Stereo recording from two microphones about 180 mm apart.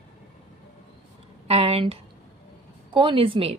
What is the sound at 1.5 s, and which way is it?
A woman's voice, 35° right (ahead or behind).